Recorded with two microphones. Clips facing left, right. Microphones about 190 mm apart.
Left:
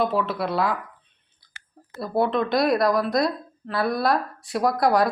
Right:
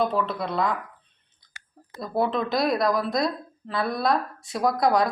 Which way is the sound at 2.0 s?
Centre (ahead or behind).